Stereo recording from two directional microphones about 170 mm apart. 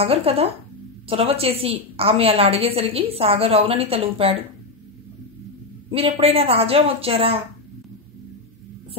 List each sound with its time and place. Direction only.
0.0 s a woman's voice: 35° right (ahead or behind)
5.9 s a woman's voice: 35° right (ahead or behind)